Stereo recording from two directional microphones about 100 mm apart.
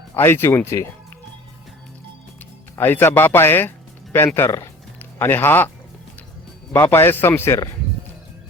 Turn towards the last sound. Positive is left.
turn(degrees=25)  # may be behind; listen again after turning